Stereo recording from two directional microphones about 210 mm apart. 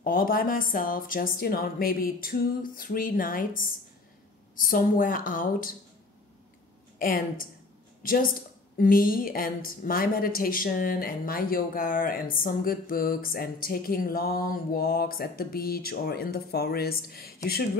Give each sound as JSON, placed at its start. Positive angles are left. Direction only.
{"t": 0.0, "sound": "a woman's voice", "side_deg": 45}
{"t": 4.6, "sound": "a woman's voice", "side_deg": 40}
{"t": 7.0, "sound": "a woman's voice", "side_deg": 40}